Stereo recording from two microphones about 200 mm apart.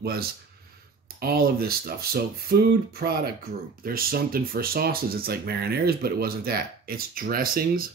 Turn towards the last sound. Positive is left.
turn(degrees=-45)  # may be behind; listen again after turning